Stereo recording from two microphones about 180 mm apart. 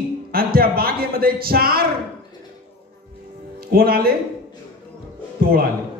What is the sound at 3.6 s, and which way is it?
Speech, 55° right (ahead or behind).